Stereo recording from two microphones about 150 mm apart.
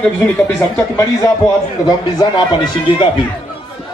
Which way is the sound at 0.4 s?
20° left (ahead or behind).